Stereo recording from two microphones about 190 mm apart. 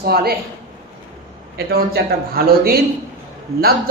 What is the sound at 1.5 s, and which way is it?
A man's voice, 55° right (ahead or behind).